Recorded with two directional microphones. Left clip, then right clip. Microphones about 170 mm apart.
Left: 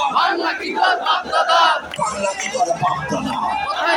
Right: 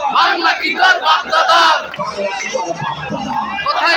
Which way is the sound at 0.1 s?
Centre (ahead or behind).